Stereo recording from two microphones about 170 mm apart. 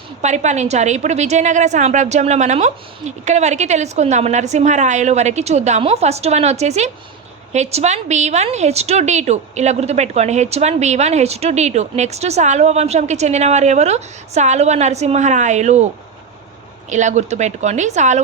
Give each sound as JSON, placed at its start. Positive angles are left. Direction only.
{"t": 0.2, "sound": "a woman's voice", "side_deg": -45}
{"t": 16.9, "sound": "a woman's voice", "side_deg": -45}